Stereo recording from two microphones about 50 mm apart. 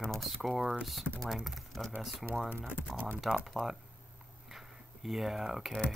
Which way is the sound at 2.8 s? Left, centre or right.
Left.